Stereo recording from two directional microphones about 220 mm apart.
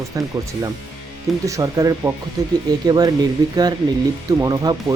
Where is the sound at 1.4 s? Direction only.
15° right (ahead or behind).